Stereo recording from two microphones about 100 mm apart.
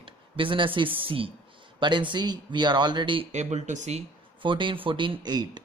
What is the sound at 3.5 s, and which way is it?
Speech, 90° right.